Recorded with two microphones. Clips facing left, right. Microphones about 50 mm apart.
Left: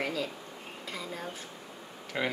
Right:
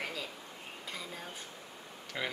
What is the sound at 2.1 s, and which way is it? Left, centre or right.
Speech, centre.